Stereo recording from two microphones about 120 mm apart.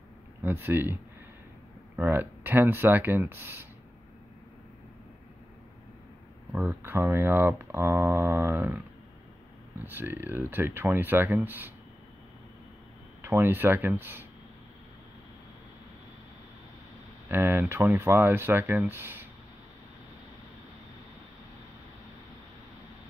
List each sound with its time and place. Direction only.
0.4 s speech: 15° right (ahead or behind)
2.0 s speech: 15° right (ahead or behind)
6.5 s speech: 15° right (ahead or behind)
9.8 s speech: 15° right (ahead or behind)
13.2 s speech: 20° right (ahead or behind)
17.3 s speech: 20° right (ahead or behind)